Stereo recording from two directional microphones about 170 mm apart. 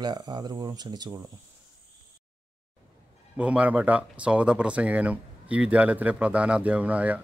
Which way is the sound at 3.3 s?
5° right (ahead or behind).